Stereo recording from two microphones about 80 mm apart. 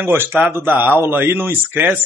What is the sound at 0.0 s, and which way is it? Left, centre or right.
A man's voice, right.